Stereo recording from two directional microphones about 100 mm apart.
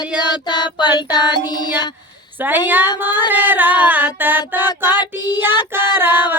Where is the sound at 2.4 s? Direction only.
20° right (ahead or behind).